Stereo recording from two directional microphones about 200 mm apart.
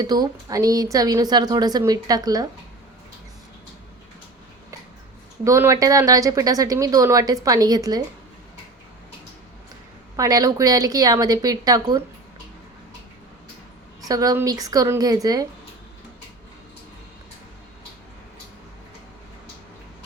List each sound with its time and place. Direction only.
0.0 s a woman's voice: 20° right (ahead or behind)
5.5 s speech: 15° right (ahead or behind)
10.2 s speech: 15° right (ahead or behind)
14.1 s speech: 15° right (ahead or behind)